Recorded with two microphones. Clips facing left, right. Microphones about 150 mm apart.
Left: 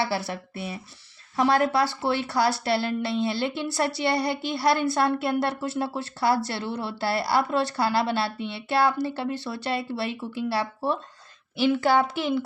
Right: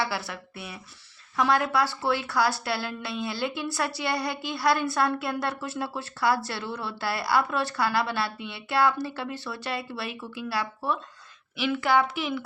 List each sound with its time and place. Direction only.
0.0 s a woman's voice: 30° left (ahead or behind)